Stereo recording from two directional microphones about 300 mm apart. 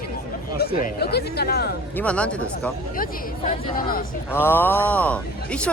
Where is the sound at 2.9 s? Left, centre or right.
Left.